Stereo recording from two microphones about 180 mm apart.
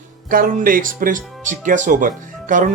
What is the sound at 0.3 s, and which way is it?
Speech, 50° right (ahead or behind).